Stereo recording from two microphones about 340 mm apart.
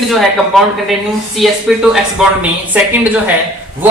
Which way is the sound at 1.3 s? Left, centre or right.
Centre.